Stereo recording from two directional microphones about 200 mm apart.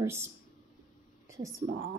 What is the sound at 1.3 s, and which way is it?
Speech, 15° right (ahead or behind).